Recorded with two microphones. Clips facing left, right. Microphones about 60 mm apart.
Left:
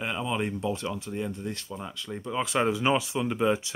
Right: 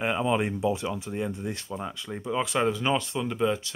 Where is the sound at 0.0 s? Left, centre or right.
Right.